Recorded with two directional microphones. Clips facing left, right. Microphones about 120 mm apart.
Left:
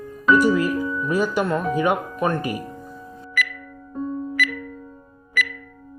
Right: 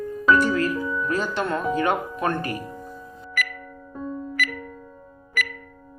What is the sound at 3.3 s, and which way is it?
Music, 45° right (ahead or behind).